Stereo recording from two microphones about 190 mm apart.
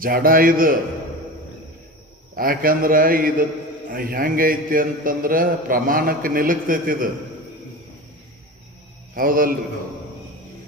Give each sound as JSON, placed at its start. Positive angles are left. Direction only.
{"t": 0.0, "sound": "a man's voice", "side_deg": -50}
{"t": 2.3, "sound": "a man's voice", "side_deg": -50}
{"t": 9.1, "sound": "a man's voice", "side_deg": -50}